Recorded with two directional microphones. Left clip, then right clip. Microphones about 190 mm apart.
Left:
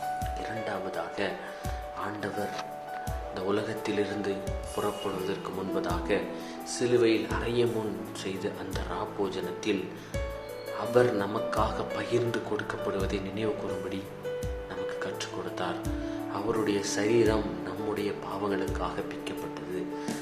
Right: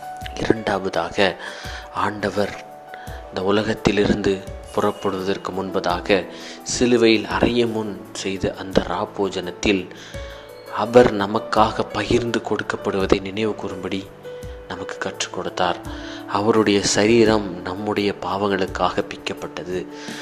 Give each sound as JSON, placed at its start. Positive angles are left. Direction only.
{"t": 0.3, "sound": "speech", "side_deg": -50}
{"t": 10.9, "sound": "speech", "side_deg": -40}
{"t": 14.7, "sound": "speech", "side_deg": -40}